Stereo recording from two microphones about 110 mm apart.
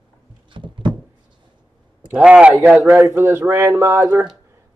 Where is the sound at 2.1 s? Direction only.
10° right (ahead or behind).